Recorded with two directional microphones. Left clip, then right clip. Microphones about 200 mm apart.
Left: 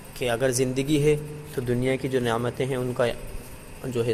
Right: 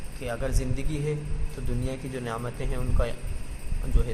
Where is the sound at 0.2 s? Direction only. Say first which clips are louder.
Left 9 dB; 30° left (ahead or behind).